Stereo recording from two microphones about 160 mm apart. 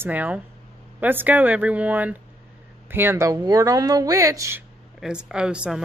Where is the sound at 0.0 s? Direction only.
10° right (ahead or behind).